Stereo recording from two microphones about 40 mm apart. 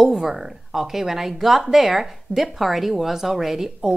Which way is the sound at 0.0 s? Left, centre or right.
Centre.